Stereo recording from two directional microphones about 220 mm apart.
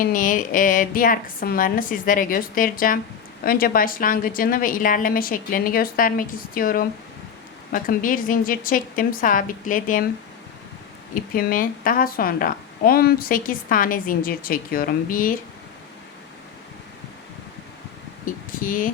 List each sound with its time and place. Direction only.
0.0 s a woman's voice: 35° left (ahead or behind)
11.1 s a woman's voice: 40° left (ahead or behind)
18.6 s a woman's voice: 40° left (ahead or behind)